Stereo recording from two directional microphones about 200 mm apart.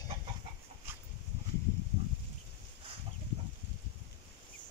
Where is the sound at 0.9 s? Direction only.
10° right (ahead or behind).